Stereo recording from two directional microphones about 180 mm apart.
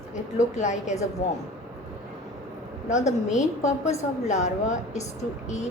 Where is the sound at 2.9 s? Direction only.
40° left (ahead or behind).